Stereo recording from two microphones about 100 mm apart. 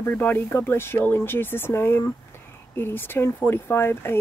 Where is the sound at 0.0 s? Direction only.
20° left (ahead or behind).